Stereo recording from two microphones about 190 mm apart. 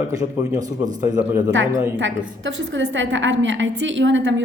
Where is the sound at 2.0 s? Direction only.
75° right (ahead or behind).